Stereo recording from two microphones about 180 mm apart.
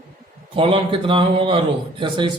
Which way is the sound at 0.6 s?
30° right (ahead or behind).